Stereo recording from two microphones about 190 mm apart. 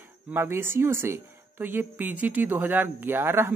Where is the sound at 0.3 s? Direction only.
10° right (ahead or behind).